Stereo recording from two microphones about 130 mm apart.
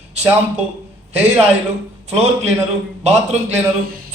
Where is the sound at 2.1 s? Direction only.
55° right (ahead or behind).